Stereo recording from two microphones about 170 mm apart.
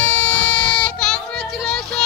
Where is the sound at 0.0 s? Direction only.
10° left (ahead or behind).